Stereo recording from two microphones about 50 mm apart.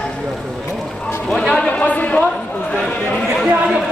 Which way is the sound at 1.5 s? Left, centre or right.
Left.